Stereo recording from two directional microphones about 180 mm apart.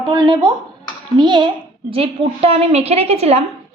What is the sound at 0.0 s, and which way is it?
A woman's voice, 20° right (ahead or behind).